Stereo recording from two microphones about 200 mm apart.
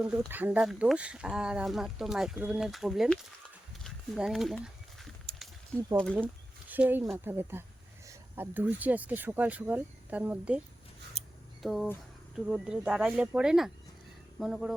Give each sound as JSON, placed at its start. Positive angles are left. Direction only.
{"t": 0.0, "sound": "speech", "side_deg": -5}
{"t": 3.8, "sound": "a sound", "side_deg": 0}
{"t": 5.7, "sound": "speech", "side_deg": 5}
{"t": 6.1, "sound": "speech", "side_deg": -10}
{"t": 11.2, "sound": "scissors", "side_deg": -30}
{"t": 11.6, "sound": "speech", "side_deg": 0}